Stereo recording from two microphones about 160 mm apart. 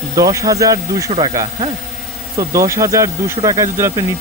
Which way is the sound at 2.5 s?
20° right (ahead or behind).